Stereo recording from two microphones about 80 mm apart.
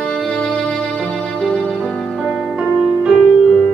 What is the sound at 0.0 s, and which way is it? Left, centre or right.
Music, centre.